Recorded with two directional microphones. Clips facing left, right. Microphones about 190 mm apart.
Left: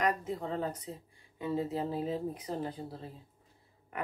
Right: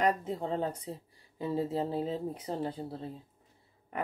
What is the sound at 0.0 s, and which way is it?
Speech, 30° right (ahead or behind).